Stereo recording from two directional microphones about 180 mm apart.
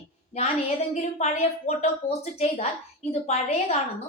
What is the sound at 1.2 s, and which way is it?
Speech, 35° left (ahead or behind).